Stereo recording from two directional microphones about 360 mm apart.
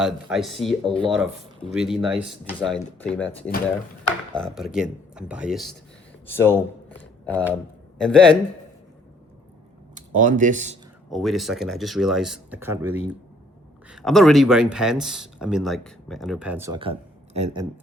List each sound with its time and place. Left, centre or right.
0.0 s speech: centre
9.9 s speech: right
11.1 s speech: centre